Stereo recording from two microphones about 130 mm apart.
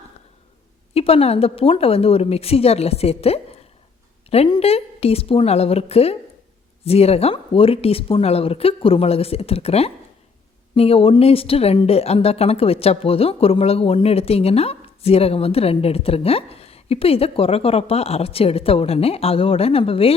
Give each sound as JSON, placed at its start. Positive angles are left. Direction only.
{"t": 0.9, "sound": "speech", "side_deg": 50}
{"t": 4.6, "sound": "speech", "side_deg": 50}